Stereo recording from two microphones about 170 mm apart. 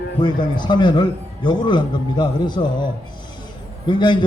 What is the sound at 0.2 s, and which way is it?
A man's voice, 25° left (ahead or behind).